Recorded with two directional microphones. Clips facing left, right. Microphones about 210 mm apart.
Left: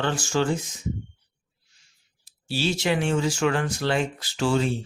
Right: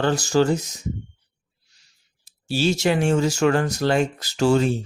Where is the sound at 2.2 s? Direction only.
45° right (ahead or behind).